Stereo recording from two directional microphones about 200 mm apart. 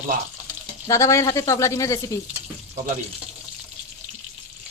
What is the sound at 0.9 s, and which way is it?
Speech, 15° left (ahead or behind).